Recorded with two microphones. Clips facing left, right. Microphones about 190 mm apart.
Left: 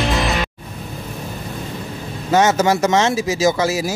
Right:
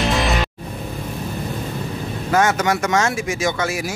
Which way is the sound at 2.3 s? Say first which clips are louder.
Left 3 dB; 20° left (ahead or behind).